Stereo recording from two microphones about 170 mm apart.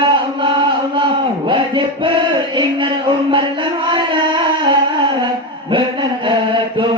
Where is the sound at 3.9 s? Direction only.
30° right (ahead or behind).